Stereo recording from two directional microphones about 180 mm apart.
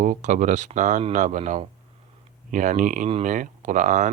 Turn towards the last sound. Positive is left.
turn(degrees=-45)  # may be behind; listen again after turning